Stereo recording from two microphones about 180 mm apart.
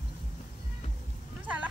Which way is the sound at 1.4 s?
10° right (ahead or behind).